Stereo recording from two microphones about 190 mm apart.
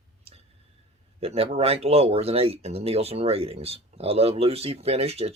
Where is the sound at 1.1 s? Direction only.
30° right (ahead or behind).